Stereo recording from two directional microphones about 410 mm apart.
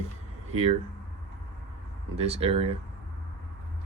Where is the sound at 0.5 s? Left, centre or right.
Centre.